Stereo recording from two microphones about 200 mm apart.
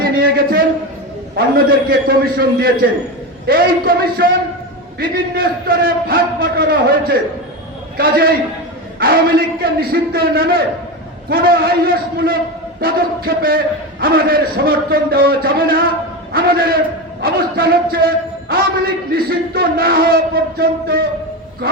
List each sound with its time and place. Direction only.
0.0 s a man's voice: 50° right (ahead or behind)